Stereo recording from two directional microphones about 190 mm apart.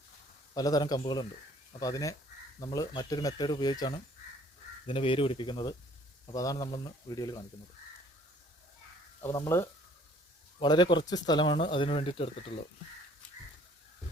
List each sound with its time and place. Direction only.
0.5 s speech: 20° left (ahead or behind)
9.2 s speech: 15° left (ahead or behind)